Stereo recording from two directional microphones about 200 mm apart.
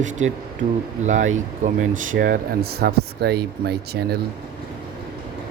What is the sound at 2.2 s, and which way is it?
Speech, 50° right (ahead or behind).